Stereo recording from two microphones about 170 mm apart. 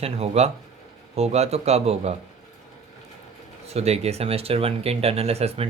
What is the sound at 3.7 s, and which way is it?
Speech, 40° right (ahead or behind).